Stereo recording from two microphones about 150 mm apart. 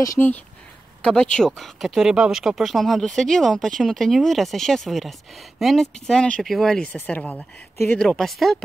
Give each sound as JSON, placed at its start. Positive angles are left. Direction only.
{"t": 0.0, "sound": "speech", "side_deg": 20}
{"t": 1.0, "sound": "speech", "side_deg": 5}